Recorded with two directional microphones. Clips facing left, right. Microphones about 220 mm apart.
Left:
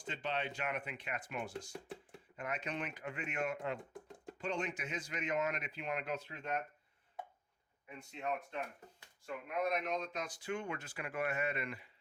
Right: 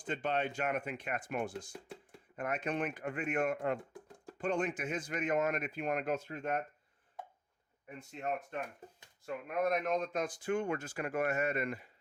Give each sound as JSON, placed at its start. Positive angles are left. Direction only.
{"t": 0.0, "sound": "speech", "side_deg": -50}
{"t": 7.9, "sound": "speech", "side_deg": -50}